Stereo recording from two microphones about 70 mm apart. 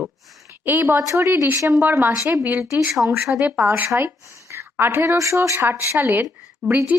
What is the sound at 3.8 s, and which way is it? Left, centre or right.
Speech, right.